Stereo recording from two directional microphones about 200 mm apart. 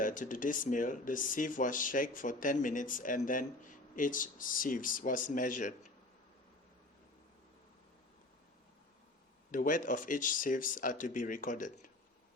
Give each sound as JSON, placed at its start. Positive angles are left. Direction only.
{"t": 0.0, "sound": "speech", "side_deg": 40}
{"t": 9.5, "sound": "speech", "side_deg": 40}